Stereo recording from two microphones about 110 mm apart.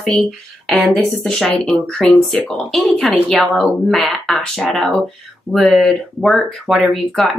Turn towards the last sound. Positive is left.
turn(degrees=0)  # may be behind; listen again after turning